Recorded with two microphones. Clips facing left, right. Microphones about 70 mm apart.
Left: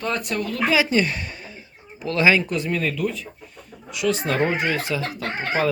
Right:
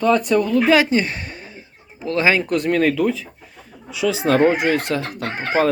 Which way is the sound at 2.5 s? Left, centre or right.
Right.